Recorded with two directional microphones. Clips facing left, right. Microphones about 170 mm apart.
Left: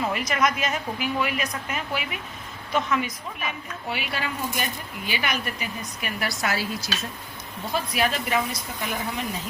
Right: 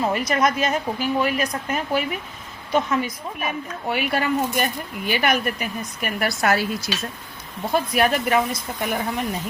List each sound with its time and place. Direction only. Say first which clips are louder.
0.0 s a woman's voice: right 4 dB; 35° right (ahead or behind)
3.8 s speech: right 8 dB; 50° right (ahead or behind)
7.7 s speech: right 5 dB; 55° right (ahead or behind)